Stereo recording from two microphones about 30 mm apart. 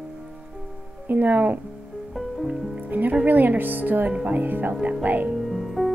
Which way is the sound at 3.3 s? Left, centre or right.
Right.